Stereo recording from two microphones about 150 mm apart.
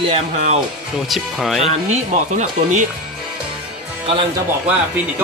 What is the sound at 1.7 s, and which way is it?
Speech, 50° right (ahead or behind).